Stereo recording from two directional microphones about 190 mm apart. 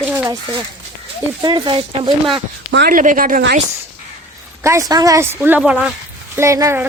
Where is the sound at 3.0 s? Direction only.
45° right (ahead or behind).